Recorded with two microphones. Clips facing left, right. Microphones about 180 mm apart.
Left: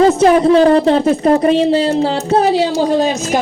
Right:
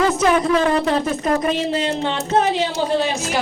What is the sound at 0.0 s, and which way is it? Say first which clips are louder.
Speech: left 7 dB; 30° left (ahead or behind).